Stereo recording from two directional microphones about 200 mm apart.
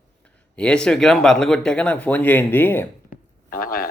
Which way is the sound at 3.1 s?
45° left (ahead or behind).